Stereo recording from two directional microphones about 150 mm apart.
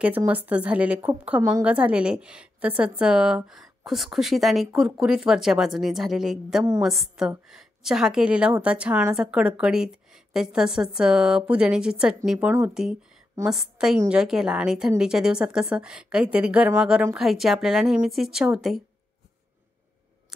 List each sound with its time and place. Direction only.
0.0 s a woman's voice: 10° right (ahead or behind)